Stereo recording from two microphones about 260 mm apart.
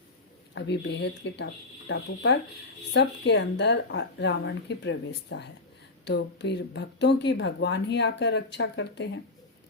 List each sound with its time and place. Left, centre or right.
0.5 s speech: left